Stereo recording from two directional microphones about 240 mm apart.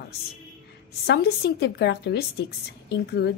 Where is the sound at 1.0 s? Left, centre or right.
Left.